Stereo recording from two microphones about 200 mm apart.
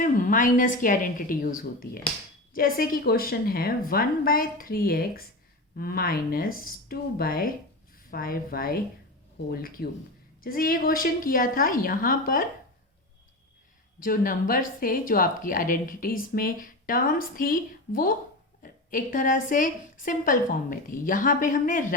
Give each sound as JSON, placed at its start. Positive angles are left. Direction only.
{"t": 0.0, "sound": "a woman's voice", "side_deg": 40}
{"t": 14.0, "sound": "a woman's voice", "side_deg": 45}